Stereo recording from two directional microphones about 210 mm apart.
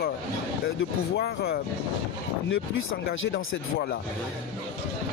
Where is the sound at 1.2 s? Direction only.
50° left (ahead or behind).